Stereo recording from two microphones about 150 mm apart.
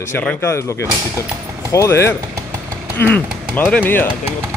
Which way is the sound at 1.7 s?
20° left (ahead or behind).